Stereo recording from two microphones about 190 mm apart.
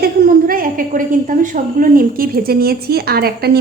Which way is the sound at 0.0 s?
50° right (ahead or behind).